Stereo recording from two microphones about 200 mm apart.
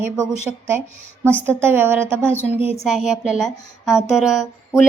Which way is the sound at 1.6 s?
10° right (ahead or behind).